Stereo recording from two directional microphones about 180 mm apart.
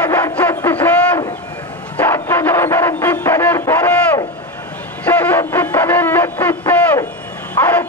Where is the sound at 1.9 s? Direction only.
10° left (ahead or behind).